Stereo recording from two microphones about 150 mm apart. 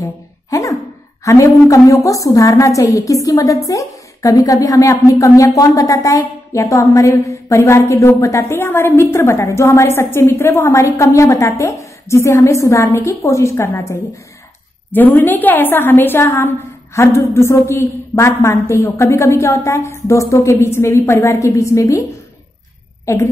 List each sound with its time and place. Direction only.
0.0 s a sound: 20° left (ahead or behind)
1.2 s a woman's voice: 20° left (ahead or behind)
23.0 s a woman's voice: 20° left (ahead or behind)